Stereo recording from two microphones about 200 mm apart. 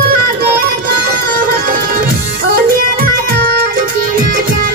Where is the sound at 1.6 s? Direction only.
45° right (ahead or behind).